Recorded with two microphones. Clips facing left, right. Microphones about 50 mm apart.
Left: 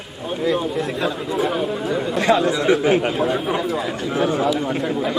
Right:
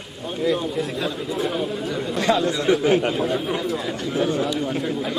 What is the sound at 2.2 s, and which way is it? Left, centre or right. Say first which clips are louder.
A man's voice: left 2 dB; left.